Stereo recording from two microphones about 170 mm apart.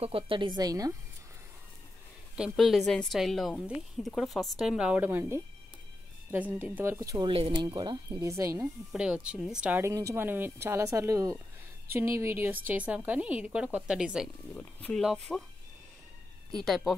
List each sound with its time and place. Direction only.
0.0 s speech: 30° right (ahead or behind)
2.3 s a woman's voice: centre (ahead or behind); by 8.6 s 15° right (ahead or behind)
8.9 s speech: 5° right (ahead or behind)
14.5 s a woman's voice: 10° left (ahead or behind)
16.5 s a woman's voice: centre (ahead or behind)